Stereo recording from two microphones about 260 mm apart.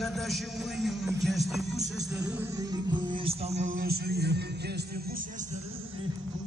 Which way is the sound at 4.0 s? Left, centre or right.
Right.